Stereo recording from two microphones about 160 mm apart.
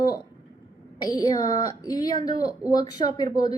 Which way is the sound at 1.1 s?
25° left (ahead or behind).